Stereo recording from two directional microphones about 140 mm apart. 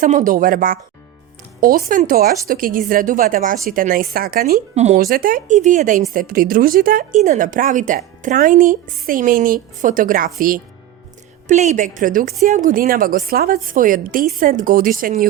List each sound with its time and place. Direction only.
0.0 s a woman's voice: 70° right (ahead or behind); by 4.6 s 90° right
4.7 s speech: 50° right (ahead or behind)
4.9 s a woman's voice: 85° right
5.5 s a woman's voice: 65° right (ahead or behind)
6.1 s a woman's voice: 90° right
7.3 s speech: 65° right (ahead or behind)
11.4 s a woman's voice: 55° right (ahead or behind); by 15.3 s 90° right